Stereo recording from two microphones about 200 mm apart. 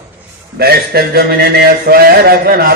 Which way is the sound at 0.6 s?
50° right (ahead or behind).